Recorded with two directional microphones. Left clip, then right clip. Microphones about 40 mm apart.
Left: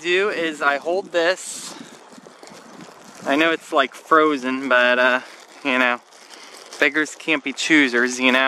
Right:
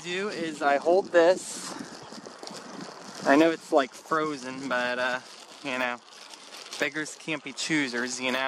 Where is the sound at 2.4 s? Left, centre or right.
Left.